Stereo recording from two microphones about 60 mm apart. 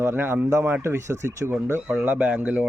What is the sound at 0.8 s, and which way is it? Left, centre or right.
Speech, right.